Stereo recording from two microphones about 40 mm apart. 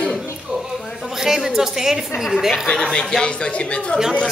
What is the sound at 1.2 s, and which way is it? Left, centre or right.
A woman's voice, centre.